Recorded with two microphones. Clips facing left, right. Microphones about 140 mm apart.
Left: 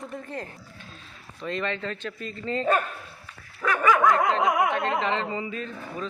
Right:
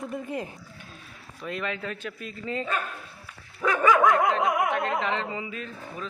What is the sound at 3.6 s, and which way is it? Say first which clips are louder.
Dog: right 1 dB; 20° right (ahead or behind).